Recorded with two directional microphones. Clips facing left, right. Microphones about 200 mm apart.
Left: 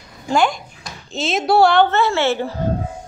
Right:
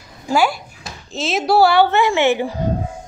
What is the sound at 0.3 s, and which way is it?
A woman's voice, 5° right (ahead or behind).